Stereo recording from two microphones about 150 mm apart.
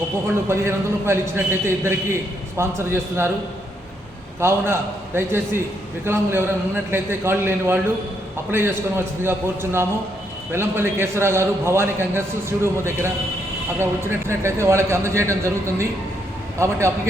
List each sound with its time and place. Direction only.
0.4 s a man's voice: 15° right (ahead or behind)
4.4 s a man's voice: 15° right (ahead or behind)